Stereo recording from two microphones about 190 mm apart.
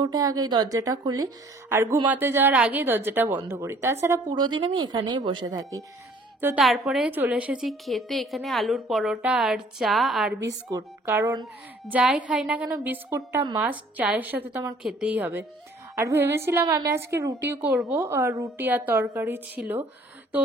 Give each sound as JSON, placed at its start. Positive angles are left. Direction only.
{"t": 0.0, "sound": "a woman's voice", "side_deg": -20}
{"t": 6.4, "sound": "a woman's voice", "side_deg": -5}
{"t": 10.7, "sound": "a woman's voice", "side_deg": -15}
{"t": 11.8, "sound": "a woman's voice", "side_deg": -5}
{"t": 14.8, "sound": "a woman's voice", "side_deg": -5}